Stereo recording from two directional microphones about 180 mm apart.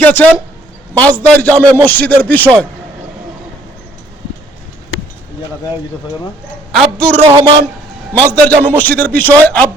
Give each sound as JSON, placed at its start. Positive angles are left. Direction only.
{"t": 0.0, "sound": "speech", "side_deg": 10}
{"t": 6.7, "sound": "a man's voice", "side_deg": 5}
{"t": 7.3, "sound": "a man's voice", "side_deg": -25}
{"t": 8.3, "sound": "speech", "side_deg": 10}